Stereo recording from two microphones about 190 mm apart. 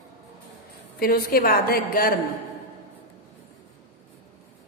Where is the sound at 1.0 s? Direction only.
50° left (ahead or behind).